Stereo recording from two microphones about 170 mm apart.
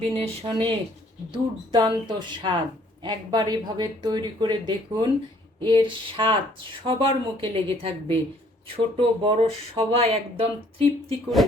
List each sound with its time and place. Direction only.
0.1 s speech: 30° right (ahead or behind)